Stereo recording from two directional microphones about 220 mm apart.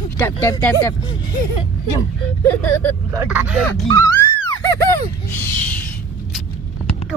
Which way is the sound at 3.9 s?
15° left (ahead or behind).